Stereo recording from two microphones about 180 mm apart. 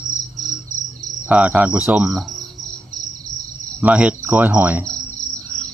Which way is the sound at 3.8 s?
5° right (ahead or behind).